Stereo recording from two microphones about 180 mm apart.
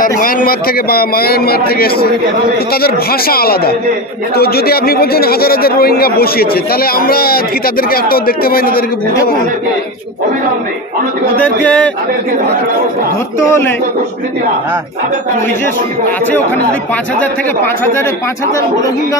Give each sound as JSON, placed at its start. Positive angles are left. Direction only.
{"t": 0.2, "sound": "speech", "side_deg": 50}
{"t": 11.4, "sound": "a man's voice", "side_deg": 5}